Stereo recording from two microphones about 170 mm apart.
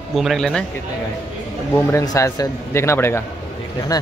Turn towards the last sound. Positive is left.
turn(degrees=20)  # may be behind; listen again after turning